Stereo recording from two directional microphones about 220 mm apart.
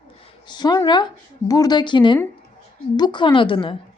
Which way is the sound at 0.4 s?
20° left (ahead or behind).